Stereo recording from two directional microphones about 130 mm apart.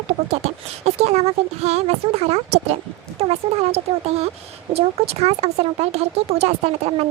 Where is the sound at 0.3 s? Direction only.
55° right (ahead or behind).